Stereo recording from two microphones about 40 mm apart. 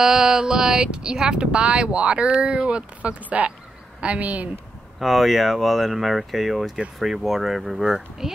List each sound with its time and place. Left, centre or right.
0.0 s speech: centre
3.0 s speech: right
4.9 s speech: centre
7.8 s speech: centre